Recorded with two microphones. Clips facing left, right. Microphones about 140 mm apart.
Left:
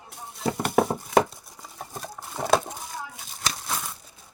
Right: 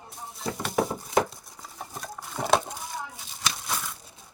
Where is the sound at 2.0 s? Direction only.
10° left (ahead or behind).